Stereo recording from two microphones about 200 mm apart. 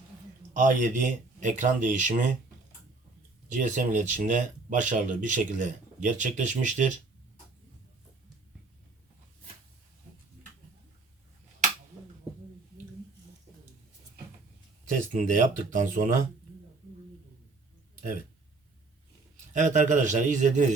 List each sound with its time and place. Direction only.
0.5 s speech: 40° right (ahead or behind)
3.5 s speech: 40° right (ahead or behind)
14.8 s speech: 40° right (ahead or behind)
19.5 s speech: 40° right (ahead or behind)